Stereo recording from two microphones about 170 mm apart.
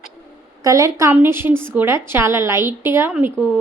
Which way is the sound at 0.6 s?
20° right (ahead or behind).